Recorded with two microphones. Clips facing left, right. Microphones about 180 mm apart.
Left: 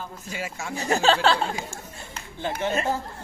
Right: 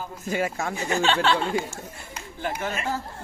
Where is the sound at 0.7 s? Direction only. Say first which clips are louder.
Left 4 dB; 35° left (ahead or behind).